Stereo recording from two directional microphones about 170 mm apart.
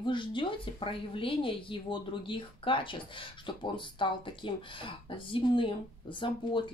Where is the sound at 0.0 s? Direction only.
30° left (ahead or behind).